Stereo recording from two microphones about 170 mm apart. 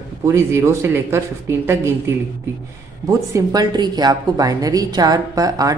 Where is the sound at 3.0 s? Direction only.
20° right (ahead or behind).